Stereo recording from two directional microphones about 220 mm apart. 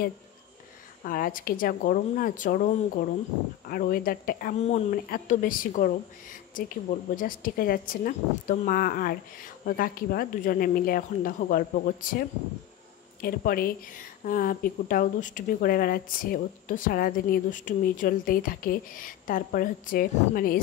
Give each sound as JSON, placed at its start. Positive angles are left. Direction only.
{"t": 1.0, "sound": "a woman's voice", "side_deg": 40}